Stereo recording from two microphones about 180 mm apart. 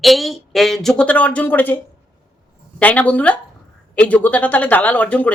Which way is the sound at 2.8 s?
10° left (ahead or behind).